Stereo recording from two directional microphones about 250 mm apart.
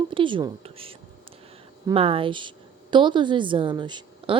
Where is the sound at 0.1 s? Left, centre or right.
Centre.